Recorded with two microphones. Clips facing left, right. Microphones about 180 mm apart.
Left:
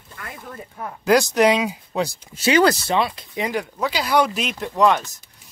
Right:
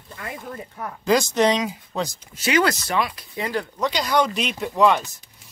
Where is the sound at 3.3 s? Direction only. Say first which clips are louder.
Left 1 dB; 15° left (ahead or behind).